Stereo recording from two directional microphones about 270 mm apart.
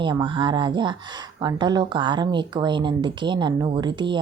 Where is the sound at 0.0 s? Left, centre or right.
Centre.